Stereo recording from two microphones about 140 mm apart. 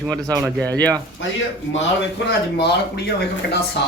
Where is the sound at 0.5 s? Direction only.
10° left (ahead or behind).